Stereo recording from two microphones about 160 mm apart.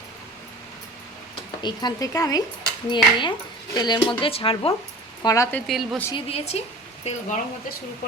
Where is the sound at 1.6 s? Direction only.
25° left (ahead or behind).